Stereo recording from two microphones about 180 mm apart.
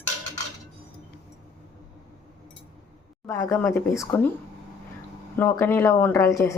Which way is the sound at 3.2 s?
15° left (ahead or behind).